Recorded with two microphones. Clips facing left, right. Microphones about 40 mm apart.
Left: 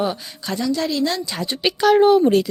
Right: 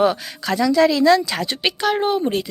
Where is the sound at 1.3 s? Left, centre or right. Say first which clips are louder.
Right 2 dB; right.